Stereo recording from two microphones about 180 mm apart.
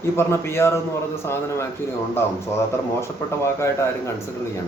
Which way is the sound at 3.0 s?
15° left (ahead or behind).